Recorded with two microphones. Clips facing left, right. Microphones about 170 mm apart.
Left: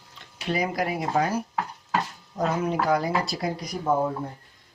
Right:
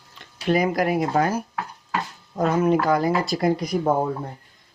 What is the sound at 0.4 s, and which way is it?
Speech, 50° right (ahead or behind).